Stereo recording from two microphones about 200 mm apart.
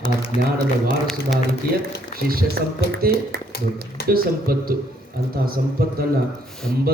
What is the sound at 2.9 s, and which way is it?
Speech, 50° right (ahead or behind).